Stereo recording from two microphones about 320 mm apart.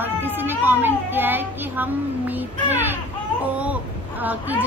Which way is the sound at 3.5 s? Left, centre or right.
Centre.